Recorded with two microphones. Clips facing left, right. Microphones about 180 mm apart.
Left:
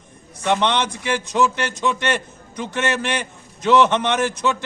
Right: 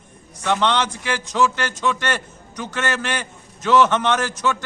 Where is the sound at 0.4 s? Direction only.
20° left (ahead or behind).